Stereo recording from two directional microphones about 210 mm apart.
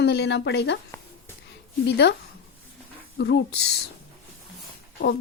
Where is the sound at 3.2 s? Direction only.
55° left (ahead or behind).